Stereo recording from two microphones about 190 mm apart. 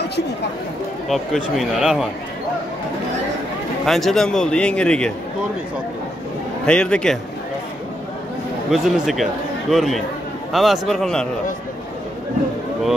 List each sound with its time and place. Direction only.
1.0 s a man's voice: centre (ahead or behind)
3.8 s a man's voice: centre (ahead or behind)
6.6 s a man's voice: 5° left (ahead or behind)
8.6 s a man's voice: centre (ahead or behind)